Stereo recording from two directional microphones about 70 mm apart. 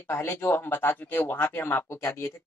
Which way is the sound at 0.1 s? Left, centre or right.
Left.